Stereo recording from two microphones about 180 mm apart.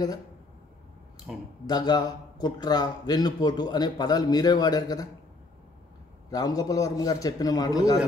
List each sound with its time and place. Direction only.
1.7 s speech: 25° left (ahead or behind)
6.3 s speech: 20° left (ahead or behind)